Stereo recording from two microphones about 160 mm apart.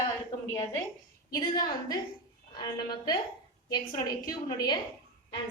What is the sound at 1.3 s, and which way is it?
A woman's voice, 25° left (ahead or behind).